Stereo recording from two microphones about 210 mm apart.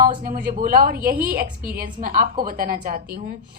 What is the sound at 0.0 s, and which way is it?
A woman's voice, 40° right (ahead or behind).